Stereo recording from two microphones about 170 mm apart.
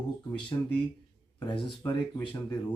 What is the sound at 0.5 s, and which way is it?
Speech, 20° left (ahead or behind).